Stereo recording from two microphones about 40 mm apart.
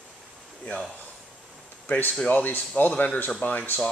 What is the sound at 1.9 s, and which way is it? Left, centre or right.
Speech, left.